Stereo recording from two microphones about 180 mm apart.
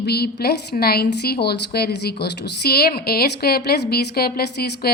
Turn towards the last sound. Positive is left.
turn(degrees=60)  # may be behind; listen again after turning